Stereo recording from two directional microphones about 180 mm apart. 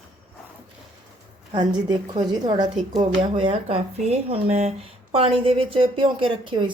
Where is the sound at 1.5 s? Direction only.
25° right (ahead or behind).